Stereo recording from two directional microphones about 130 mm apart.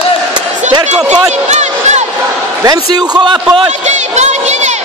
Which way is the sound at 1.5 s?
60° right (ahead or behind).